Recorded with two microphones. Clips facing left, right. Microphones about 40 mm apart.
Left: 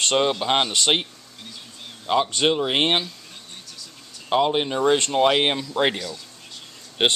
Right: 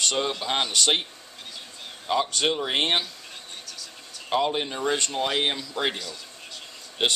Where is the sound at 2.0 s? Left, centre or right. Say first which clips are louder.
Left 4 dB; left.